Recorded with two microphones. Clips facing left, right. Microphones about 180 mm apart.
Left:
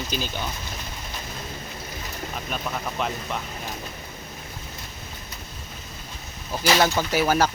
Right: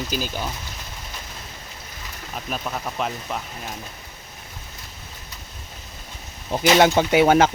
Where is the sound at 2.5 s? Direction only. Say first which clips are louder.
Right 2 dB; 5° right (ahead or behind).